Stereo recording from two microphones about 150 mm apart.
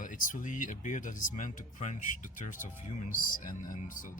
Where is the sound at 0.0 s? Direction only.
60° left (ahead or behind).